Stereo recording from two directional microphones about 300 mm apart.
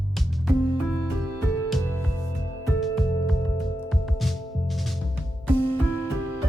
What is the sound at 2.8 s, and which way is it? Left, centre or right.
Music, centre.